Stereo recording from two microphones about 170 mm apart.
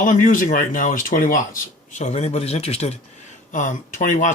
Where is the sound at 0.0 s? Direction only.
50° left (ahead or behind).